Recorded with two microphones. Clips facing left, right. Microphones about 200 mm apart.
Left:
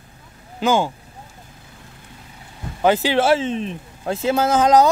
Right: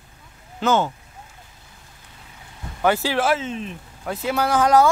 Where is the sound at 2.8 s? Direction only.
20° left (ahead or behind).